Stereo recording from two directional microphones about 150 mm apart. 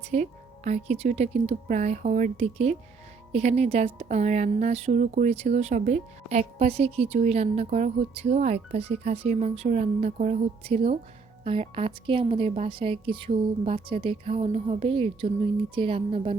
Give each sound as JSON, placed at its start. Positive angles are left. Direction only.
{"t": 0.1, "sound": "a woman's voice", "side_deg": -50}
{"t": 10.6, "sound": "a woman's voice", "side_deg": -40}